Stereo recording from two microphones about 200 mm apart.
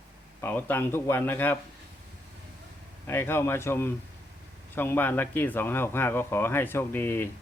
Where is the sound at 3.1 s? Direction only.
10° left (ahead or behind).